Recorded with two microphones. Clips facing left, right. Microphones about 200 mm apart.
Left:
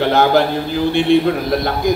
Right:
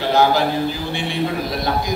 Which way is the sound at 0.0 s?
55° left (ahead or behind).